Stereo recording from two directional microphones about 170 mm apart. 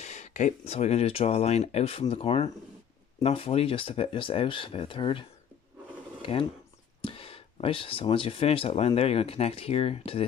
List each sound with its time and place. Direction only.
0.0 s speech: 45° left (ahead or behind)
7.0 s speech: 30° left (ahead or behind)